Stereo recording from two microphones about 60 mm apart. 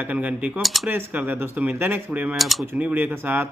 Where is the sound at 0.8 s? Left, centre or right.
Right.